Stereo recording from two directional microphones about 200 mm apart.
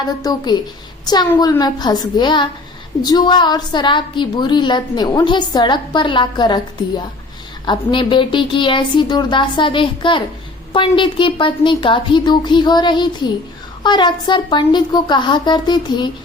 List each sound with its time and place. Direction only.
0.2 s a woman's voice: 20° left (ahead or behind)